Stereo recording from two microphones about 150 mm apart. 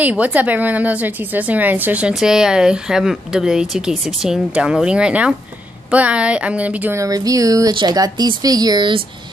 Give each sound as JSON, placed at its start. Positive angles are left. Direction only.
{"t": 0.0, "sound": "a woman's voice", "side_deg": -10}